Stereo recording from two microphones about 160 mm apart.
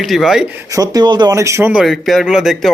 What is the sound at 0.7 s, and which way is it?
Speech, 25° right (ahead or behind).